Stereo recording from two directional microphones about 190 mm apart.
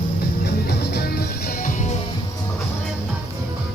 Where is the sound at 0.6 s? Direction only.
60° left (ahead or behind); by 1.9 s 40° left (ahead or behind).